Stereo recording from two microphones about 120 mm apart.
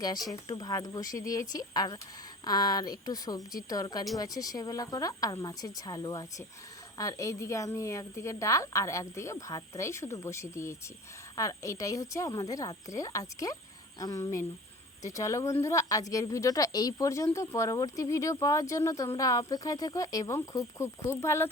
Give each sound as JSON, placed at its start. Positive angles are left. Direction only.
{"t": 0.3, "sound": "a woman's voice", "side_deg": 30}